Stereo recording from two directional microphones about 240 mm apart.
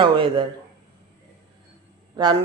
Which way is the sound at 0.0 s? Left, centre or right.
Right.